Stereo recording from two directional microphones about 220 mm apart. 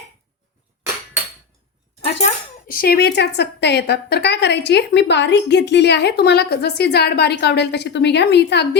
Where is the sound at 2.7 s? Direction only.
45° left (ahead or behind).